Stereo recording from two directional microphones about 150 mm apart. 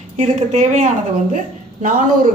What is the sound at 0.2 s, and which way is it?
A woman's voice, 50° right (ahead or behind).